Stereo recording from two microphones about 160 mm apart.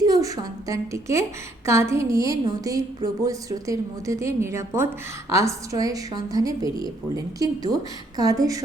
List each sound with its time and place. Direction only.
0.0 s a woman's voice: 20° right (ahead or behind)